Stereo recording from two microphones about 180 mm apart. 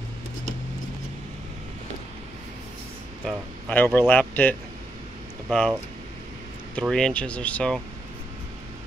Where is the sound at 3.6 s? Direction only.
10° left (ahead or behind).